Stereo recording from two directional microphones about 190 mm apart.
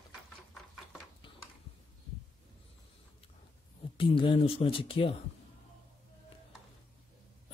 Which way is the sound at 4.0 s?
25° left (ahead or behind).